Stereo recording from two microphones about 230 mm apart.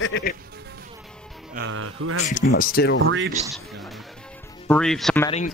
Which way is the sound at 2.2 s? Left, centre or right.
Left.